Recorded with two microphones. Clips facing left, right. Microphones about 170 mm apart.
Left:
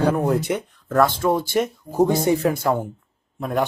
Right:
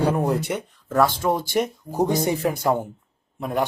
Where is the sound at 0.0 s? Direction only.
5° right (ahead or behind).